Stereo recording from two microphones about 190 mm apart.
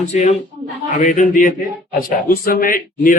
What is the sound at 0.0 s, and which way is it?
Speech, 35° left (ahead or behind).